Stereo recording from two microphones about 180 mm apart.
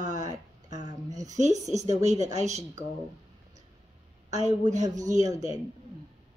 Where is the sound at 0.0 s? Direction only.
40° right (ahead or behind).